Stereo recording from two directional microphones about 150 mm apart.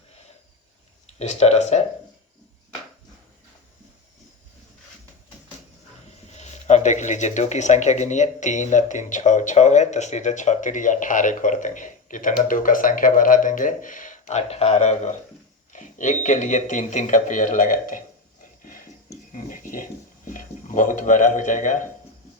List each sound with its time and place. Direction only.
1.2 s speech: 50° left (ahead or behind)
6.1 s speech: 50° left (ahead or behind)
19.3 s a sound: 60° left (ahead or behind)